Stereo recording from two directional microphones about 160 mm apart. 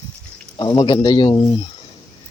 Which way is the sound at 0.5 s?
25° left (ahead or behind).